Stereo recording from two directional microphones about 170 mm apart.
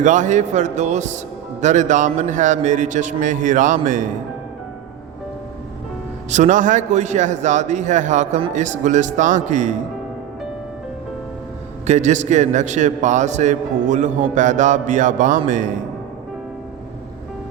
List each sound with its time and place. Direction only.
0.0 s a man's voice: 45° right (ahead or behind)
6.3 s a man's voice: 45° right (ahead or behind)
11.9 s a man's voice: 45° right (ahead or behind)